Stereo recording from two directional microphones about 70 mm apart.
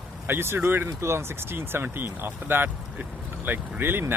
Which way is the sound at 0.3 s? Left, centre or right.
Right.